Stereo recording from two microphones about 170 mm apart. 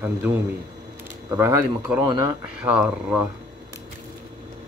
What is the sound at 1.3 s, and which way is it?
Speech, 15° right (ahead or behind).